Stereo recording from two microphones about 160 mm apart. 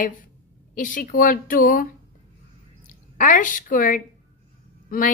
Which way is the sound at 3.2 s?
55° left (ahead or behind).